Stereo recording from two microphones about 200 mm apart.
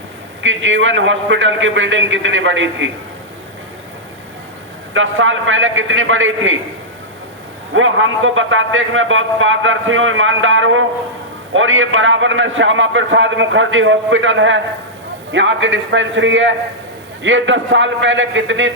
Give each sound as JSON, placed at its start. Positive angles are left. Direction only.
{"t": 0.4, "sound": "a man's voice", "side_deg": -70}
{"t": 4.9, "sound": "a man's voice", "side_deg": -75}
{"t": 7.7, "sound": "a man's voice", "side_deg": -80}